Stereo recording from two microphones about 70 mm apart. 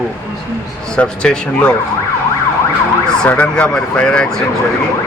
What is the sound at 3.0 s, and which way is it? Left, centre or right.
Speech, centre.